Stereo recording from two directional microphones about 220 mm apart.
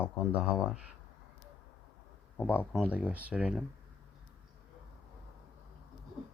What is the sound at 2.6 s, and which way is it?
Speech, centre (ahead or behind).